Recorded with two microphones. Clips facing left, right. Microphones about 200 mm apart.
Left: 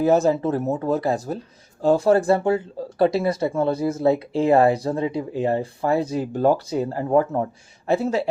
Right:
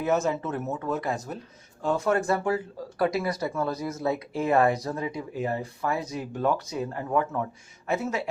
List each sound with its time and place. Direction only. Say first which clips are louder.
0.0 s speech: left 8 dB; 35° left (ahead or behind)